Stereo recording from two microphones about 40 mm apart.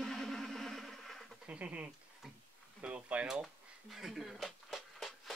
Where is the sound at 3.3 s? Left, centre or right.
Centre.